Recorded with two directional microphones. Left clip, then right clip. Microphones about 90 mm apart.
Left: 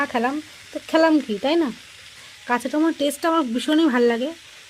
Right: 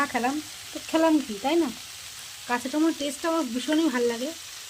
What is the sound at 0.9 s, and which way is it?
Frying, 55° left (ahead or behind).